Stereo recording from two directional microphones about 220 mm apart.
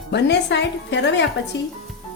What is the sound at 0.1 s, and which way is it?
Speech, 50° left (ahead or behind).